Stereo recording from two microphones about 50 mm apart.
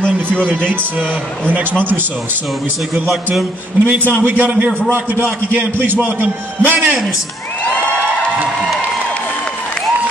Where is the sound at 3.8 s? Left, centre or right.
Right.